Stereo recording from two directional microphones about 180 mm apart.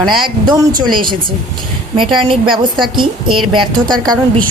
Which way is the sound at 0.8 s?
25° right (ahead or behind).